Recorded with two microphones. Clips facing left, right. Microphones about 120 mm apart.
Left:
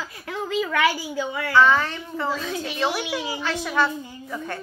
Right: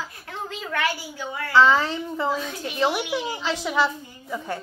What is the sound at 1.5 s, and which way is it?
A child's voice, 20° right (ahead or behind).